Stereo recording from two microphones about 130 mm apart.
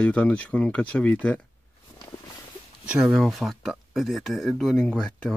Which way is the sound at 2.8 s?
5° right (ahead or behind).